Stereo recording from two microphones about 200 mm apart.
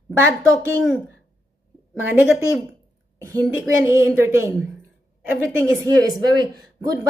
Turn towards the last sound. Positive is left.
turn(degrees=-20)  # may be behind; listen again after turning